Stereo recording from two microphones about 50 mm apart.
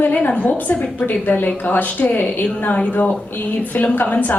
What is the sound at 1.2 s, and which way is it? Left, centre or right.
A woman's voice, left.